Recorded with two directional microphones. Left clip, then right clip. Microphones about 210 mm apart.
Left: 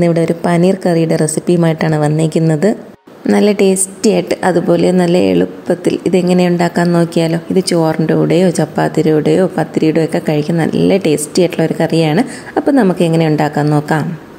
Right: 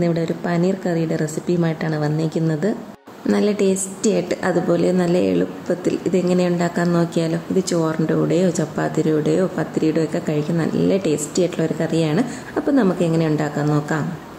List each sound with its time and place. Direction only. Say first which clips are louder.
0.0 s a woman's voice: left 9 dB; 35° left (ahead or behind)